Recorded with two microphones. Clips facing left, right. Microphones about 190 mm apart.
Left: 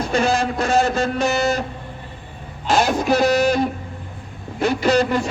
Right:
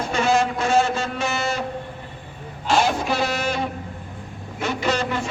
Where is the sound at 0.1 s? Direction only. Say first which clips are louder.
Even; 35° left (ahead or behind).